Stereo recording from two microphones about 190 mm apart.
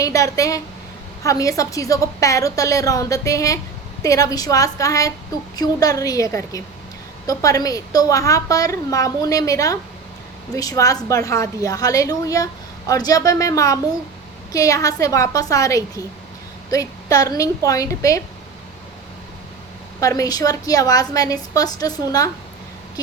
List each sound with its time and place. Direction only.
0.0 s a woman's voice: 15° left (ahead or behind)
20.0 s a woman's voice: 20° left (ahead or behind)